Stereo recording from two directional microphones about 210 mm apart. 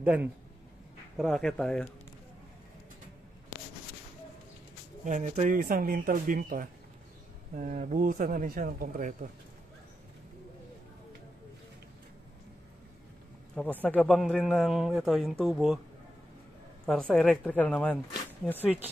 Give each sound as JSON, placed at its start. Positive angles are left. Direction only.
{"t": 0.0, "sound": "speech", "side_deg": -5}
{"t": 5.0, "sound": "speech", "side_deg": -35}
{"t": 13.7, "sound": "speech", "side_deg": 5}
{"t": 16.8, "sound": "speech", "side_deg": 5}